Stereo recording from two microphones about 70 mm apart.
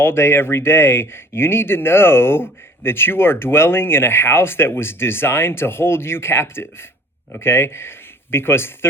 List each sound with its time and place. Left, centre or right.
0.0 s speech: left